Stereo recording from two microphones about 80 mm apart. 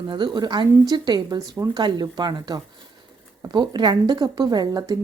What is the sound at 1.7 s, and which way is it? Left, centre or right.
Speech, right.